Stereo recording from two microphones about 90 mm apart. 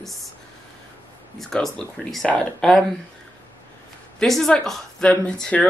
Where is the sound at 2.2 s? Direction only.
15° left (ahead or behind).